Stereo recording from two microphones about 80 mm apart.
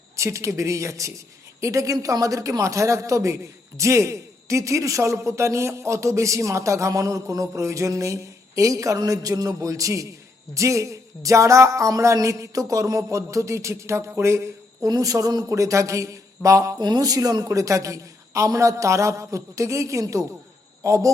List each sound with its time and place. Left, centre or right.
0.2 s a man's voice: right
14.8 s a woman's voice: right
16.8 s a woman's voice: right